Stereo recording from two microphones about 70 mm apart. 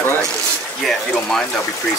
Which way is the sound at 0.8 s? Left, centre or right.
Centre.